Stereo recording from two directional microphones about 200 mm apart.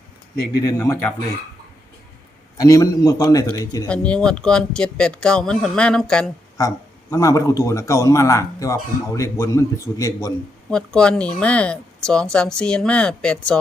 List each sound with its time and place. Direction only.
0.5 s a man's voice: 15° left (ahead or behind)
2.6 s a man's voice: 15° left (ahead or behind)
3.8 s speech: 5° left (ahead or behind)
6.6 s a man's voice: 15° left (ahead or behind)
10.7 s speech: 5° left (ahead or behind)